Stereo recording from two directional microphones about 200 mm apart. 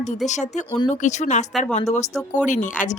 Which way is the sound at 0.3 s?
35° left (ahead or behind).